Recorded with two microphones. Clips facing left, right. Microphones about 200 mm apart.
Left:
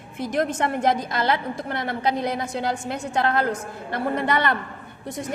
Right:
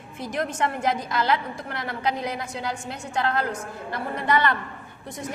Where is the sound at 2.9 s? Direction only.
55° left (ahead or behind).